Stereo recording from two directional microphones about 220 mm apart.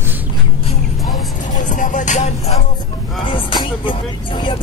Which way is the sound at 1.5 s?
35° left (ahead or behind).